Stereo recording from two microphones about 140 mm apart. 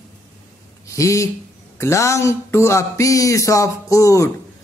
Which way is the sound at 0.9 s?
20° left (ahead or behind).